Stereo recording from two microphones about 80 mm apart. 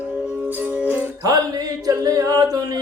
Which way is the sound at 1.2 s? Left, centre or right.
Right.